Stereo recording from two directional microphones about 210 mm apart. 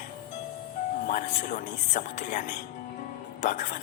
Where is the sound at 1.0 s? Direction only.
35° left (ahead or behind).